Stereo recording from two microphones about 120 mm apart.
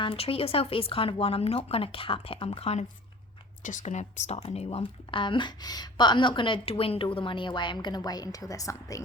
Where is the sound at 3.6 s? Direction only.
80° left.